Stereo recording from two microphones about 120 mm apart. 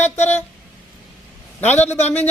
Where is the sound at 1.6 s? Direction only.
15° left (ahead or behind).